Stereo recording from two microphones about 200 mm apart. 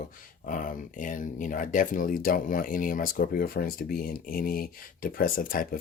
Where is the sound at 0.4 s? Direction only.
40° left (ahead or behind).